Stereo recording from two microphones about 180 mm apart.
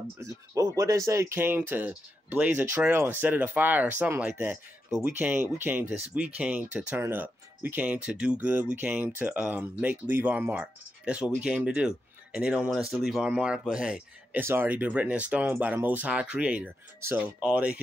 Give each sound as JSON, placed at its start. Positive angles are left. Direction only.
{"t": 0.2, "sound": "speech", "side_deg": -20}